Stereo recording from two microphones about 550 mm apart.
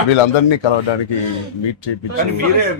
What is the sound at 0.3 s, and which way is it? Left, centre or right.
Speech, left.